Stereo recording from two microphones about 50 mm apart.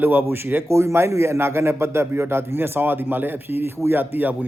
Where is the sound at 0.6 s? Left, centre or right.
Right.